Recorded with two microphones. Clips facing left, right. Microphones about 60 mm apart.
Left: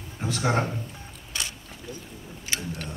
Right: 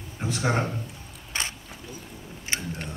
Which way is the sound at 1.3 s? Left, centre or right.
Right.